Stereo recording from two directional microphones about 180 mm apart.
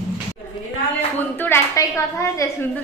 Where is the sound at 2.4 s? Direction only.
20° left (ahead or behind).